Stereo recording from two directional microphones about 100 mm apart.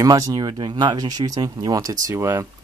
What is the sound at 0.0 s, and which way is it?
Speech, 40° right (ahead or behind).